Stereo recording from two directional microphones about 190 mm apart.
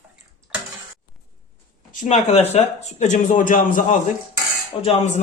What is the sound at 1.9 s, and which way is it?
Speech, 40° left (ahead or behind).